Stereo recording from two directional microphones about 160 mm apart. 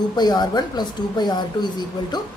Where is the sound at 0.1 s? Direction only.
25° left (ahead or behind).